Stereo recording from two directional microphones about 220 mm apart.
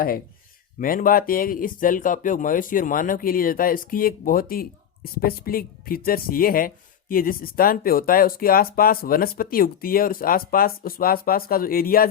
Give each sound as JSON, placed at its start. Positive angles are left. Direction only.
{"t": 0.8, "sound": "speech", "side_deg": 40}